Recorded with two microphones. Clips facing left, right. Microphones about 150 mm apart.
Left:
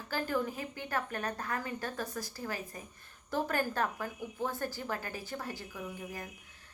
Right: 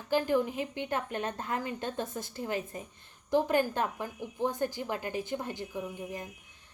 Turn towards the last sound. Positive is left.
turn(degrees=-20)  # may be behind; listen again after turning